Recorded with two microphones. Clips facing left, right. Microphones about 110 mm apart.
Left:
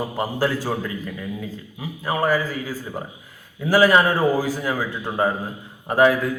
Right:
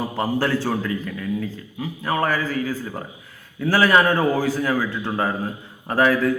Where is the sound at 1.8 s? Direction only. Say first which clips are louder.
Even; 10° left (ahead or behind).